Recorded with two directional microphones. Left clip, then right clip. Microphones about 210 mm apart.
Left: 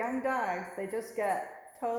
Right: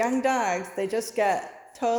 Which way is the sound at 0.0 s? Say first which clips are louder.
Right 7 dB; 60° right (ahead or behind).